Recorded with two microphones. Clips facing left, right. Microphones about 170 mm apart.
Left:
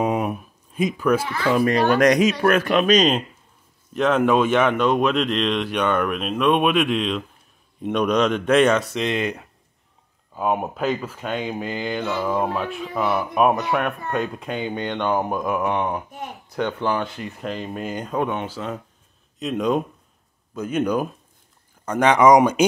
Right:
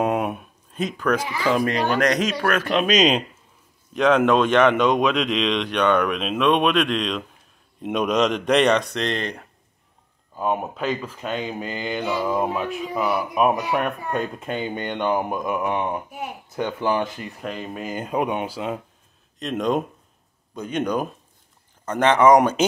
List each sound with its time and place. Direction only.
0.0 s a sound: centre (ahead or behind)
0.7 s speech: 10° left (ahead or behind)
1.2 s speech: 10° right (ahead or behind)
1.7 s speech: 40° left (ahead or behind)
2.0 s speech: 10° left (ahead or behind)
12.0 s speech: 10° right (ahead or behind)
19.4 s speech: centre (ahead or behind)